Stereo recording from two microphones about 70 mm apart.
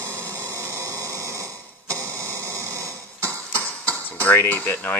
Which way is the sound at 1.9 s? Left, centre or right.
Right.